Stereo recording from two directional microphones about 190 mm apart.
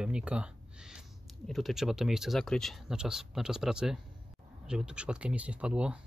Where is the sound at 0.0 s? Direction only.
5° right (ahead or behind).